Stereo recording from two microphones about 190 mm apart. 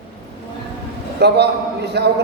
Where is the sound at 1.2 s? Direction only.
60° right (ahead or behind).